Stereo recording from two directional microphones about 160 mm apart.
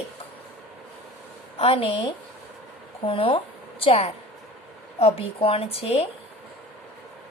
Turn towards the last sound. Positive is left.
turn(degrees=40)  # may be behind; listen again after turning